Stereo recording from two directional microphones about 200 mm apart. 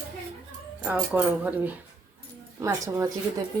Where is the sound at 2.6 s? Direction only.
15° right (ahead or behind).